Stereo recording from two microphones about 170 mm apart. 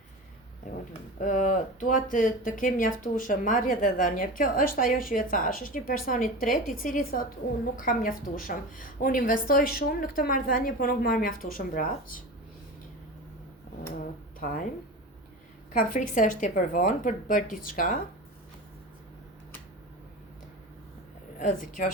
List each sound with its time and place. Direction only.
1.2 s a woman's voice: 50° left (ahead or behind)
14.3 s speech: 55° left (ahead or behind)
15.7 s speech: 50° left (ahead or behind)
21.3 s speech: 50° left (ahead or behind)